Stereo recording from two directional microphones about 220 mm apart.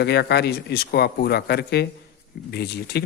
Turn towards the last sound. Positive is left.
turn(degrees=50)  # may be behind; listen again after turning